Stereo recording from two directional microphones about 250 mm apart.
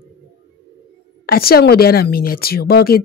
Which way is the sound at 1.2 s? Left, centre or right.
Left.